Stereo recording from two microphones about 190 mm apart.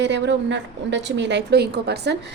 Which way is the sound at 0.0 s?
70° right (ahead or behind).